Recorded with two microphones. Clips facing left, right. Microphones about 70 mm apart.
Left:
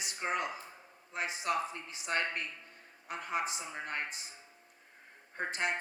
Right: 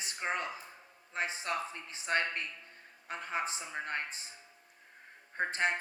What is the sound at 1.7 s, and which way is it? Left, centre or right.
Speech, right.